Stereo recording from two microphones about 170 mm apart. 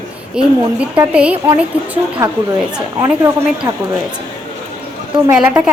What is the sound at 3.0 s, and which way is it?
Speech, 20° right (ahead or behind).